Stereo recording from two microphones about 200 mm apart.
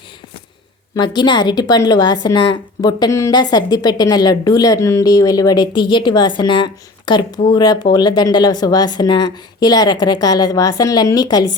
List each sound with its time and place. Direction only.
0.9 s a woman's voice: 20° left (ahead or behind)